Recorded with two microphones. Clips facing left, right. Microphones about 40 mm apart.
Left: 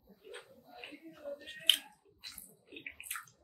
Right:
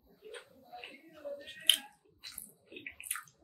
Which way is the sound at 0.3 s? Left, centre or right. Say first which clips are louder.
Right 2 dB; centre.